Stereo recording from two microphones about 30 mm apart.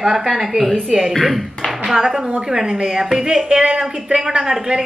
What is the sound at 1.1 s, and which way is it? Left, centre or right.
Speech, centre.